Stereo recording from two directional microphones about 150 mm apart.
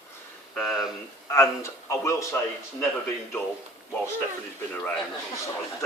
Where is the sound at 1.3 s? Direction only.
20° left (ahead or behind).